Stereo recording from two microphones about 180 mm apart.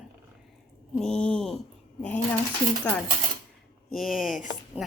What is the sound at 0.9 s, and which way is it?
A woman's voice, 5° left (ahead or behind).